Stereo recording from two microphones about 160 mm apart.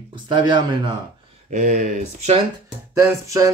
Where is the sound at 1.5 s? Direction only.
50° right (ahead or behind).